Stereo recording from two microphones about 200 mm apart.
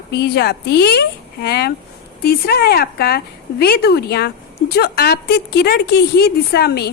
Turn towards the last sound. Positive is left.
turn(degrees=50)  # may be behind; listen again after turning